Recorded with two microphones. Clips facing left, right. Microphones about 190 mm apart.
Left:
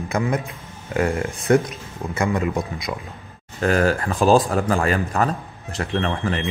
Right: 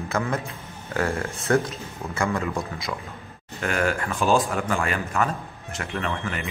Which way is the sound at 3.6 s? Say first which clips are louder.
Left 6 dB; 35° left (ahead or behind).